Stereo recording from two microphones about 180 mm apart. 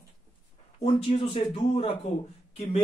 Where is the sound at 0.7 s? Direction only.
35° left (ahead or behind).